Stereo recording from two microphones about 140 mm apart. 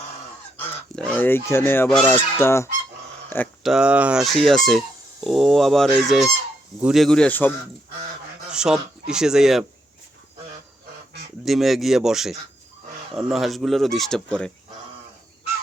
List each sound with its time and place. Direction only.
0.9 s speech: 10° left (ahead or behind)
3.6 s speech: 5° right (ahead or behind); by 7.5 s 10° left (ahead or behind)
8.4 s speech: 5° right (ahead or behind)
11.4 s speech: centre (ahead or behind)